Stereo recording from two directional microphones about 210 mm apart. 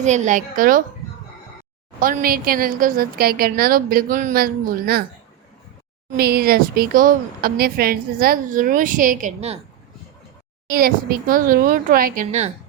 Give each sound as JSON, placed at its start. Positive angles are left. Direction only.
{"t": 0.0, "sound": "speech", "side_deg": -35}
{"t": 2.0, "sound": "a woman's voice", "side_deg": -40}
{"t": 6.1, "sound": "speech", "side_deg": -50}
{"t": 10.7, "sound": "speech", "side_deg": -45}